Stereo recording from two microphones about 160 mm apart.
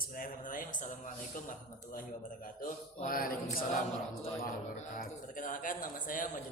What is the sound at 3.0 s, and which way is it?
Speech, 65° left (ahead or behind).